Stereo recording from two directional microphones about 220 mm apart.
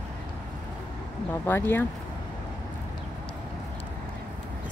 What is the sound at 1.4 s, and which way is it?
Speech, 10° left (ahead or behind).